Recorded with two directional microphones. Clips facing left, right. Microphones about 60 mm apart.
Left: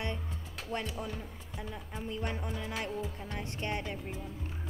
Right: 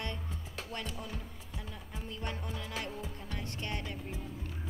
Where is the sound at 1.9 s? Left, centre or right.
Left.